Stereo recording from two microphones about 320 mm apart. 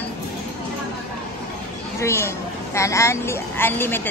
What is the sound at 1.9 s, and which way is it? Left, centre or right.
A woman's voice, centre.